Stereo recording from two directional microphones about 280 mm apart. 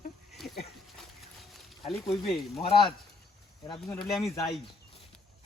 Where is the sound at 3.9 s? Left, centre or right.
Centre.